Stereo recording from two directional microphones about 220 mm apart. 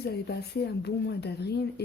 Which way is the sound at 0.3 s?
45° left (ahead or behind).